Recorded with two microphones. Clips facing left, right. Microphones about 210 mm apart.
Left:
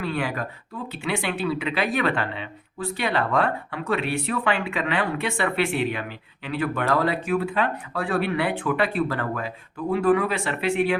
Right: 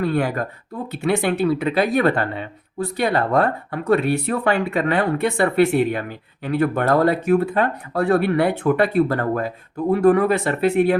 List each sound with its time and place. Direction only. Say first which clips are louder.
0.0 s speech: right 6 dB; 45° right (ahead or behind)